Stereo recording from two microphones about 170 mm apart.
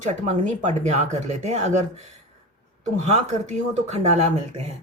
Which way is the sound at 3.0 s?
40° right (ahead or behind).